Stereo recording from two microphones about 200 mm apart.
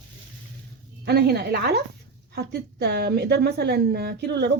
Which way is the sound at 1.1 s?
55° right (ahead or behind).